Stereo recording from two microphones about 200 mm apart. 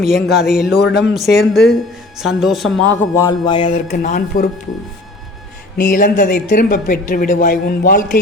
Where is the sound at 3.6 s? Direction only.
40° left (ahead or behind).